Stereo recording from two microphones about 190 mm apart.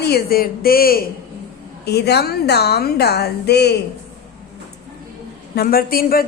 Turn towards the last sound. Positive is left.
turn(degrees=50)  # may be behind; listen again after turning